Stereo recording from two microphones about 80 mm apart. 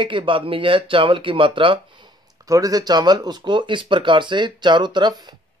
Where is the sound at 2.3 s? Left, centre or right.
Right.